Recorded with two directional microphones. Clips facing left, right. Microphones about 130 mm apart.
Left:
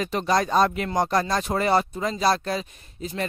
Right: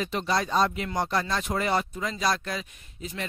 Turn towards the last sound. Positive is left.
turn(degrees=35)  # may be behind; listen again after turning